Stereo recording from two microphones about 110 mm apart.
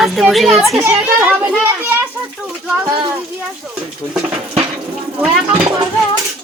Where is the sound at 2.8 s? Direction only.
40° right (ahead or behind).